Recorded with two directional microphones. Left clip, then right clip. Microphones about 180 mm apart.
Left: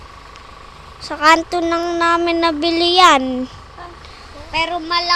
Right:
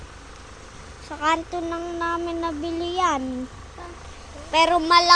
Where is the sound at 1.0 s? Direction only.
45° left (ahead or behind).